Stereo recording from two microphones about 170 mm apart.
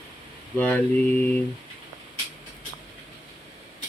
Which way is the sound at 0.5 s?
10° left (ahead or behind).